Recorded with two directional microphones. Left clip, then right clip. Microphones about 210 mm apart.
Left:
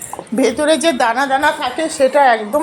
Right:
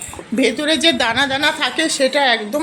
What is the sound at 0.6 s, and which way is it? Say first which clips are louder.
A woman's voice: left 3 dB; 5° right (ahead or behind).